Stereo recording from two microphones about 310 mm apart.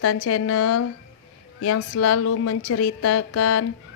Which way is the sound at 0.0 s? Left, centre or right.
Left.